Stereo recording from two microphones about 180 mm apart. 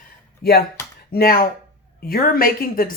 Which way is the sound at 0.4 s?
60° left (ahead or behind).